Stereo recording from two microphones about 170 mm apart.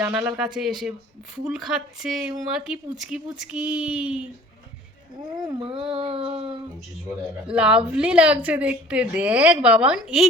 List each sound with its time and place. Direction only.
0.3 s speech: 5° right (ahead or behind)
5.5 s a sound: 30° right (ahead or behind)
7.4 s a woman's voice: 5° right (ahead or behind)